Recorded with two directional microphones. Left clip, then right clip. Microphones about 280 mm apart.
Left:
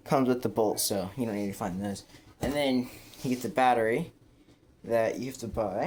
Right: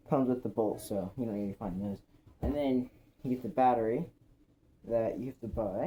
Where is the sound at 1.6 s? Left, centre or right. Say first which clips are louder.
Left 6 dB; left.